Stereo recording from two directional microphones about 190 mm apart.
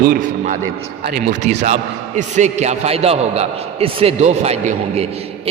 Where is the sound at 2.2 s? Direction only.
40° right (ahead or behind).